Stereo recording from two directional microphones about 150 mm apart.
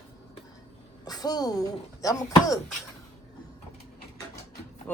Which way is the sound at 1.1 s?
25° left (ahead or behind).